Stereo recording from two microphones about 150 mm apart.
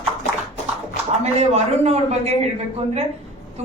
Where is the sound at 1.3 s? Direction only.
45° right (ahead or behind).